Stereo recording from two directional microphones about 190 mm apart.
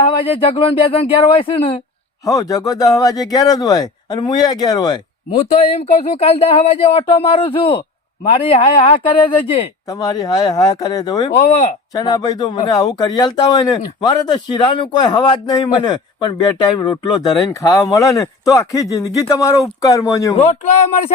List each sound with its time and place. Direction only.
0.0 s speech: 30° left (ahead or behind)
2.2 s speech: 20° left (ahead or behind)
5.4 s speech: 35° left (ahead or behind)
9.9 s speech: 20° left (ahead or behind)